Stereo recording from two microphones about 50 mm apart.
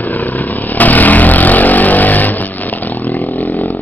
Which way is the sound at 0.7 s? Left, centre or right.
Left.